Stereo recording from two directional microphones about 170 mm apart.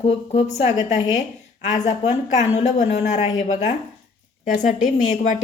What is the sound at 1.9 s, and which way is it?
Speech, 40° left (ahead or behind).